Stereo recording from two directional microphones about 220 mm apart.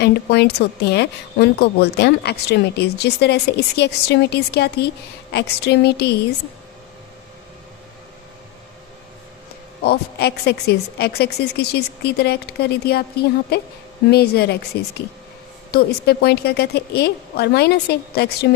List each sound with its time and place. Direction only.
0.0 s a woman's voice: 50° left (ahead or behind)
9.8 s a woman's voice: 45° left (ahead or behind)